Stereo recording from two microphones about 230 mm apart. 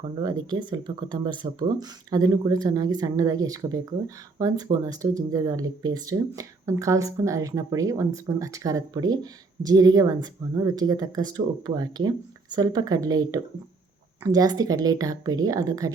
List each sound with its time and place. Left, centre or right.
0.2 s speech: centre